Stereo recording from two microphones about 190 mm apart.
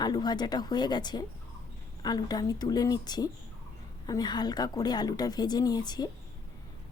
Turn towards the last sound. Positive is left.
turn(degrees=20)  # may be behind; listen again after turning